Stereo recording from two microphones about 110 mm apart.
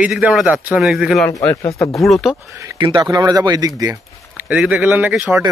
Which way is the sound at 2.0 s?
Centre (ahead or behind).